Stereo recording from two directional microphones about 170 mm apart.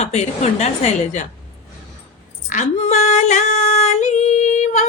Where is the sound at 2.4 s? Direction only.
45° left (ahead or behind).